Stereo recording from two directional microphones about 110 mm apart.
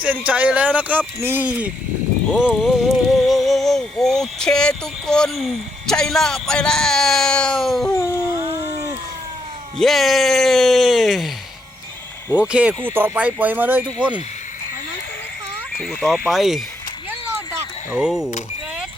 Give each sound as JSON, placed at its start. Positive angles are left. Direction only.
{"t": 0.3, "sound": "speech", "side_deg": -15}
{"t": 2.3, "sound": "music", "side_deg": -5}
{"t": 7.9, "sound": "dog", "side_deg": 25}
{"t": 8.2, "sound": "howl", "side_deg": -30}
{"t": 9.7, "sound": "speech", "side_deg": 0}
{"t": 12.3, "sound": "speech", "side_deg": -10}
{"t": 15.8, "sound": "speech", "side_deg": 5}
{"t": 18.0, "sound": "speech", "side_deg": -5}